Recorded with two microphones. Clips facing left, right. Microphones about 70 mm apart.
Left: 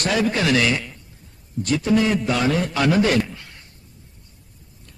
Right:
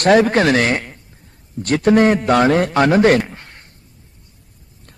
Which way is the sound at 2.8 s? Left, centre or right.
Right.